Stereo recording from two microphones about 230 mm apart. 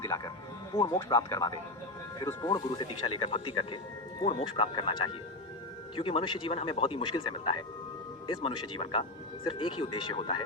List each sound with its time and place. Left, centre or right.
0.7 s speech: centre